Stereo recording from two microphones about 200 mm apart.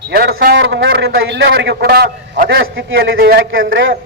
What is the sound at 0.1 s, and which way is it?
A man's voice, 50° right (ahead or behind).